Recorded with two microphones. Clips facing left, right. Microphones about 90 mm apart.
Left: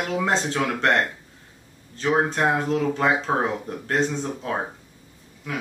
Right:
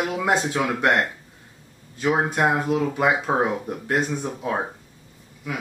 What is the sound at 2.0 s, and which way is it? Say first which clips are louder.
Speech: even; 10° right (ahead or behind).